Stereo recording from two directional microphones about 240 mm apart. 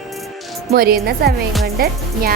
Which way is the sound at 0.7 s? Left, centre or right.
Right.